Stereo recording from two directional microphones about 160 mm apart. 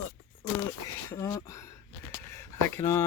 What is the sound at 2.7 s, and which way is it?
Speech, 20° left (ahead or behind).